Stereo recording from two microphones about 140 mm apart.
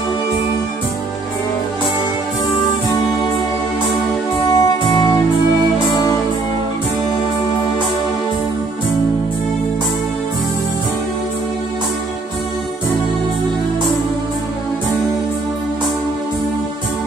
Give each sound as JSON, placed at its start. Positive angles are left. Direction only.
{"t": 4.6, "sound": "music", "side_deg": 30}